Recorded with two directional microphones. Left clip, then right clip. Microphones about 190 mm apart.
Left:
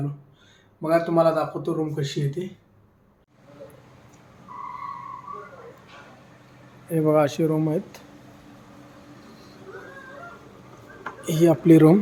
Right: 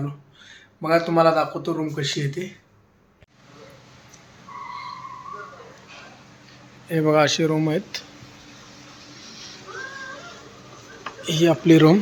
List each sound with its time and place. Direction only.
0.8 s a man's voice: 5° right (ahead or behind)
6.9 s a man's voice: centre (ahead or behind)
11.0 s speech: 15° left (ahead or behind)